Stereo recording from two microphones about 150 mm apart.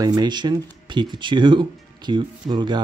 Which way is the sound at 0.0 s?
25° right (ahead or behind).